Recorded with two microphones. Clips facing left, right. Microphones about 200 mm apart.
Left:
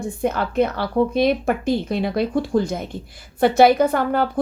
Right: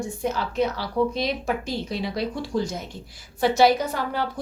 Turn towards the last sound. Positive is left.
turn(degrees=55)  # may be behind; listen again after turning